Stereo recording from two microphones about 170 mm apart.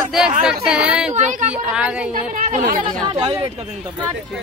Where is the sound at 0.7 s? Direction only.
5° right (ahead or behind).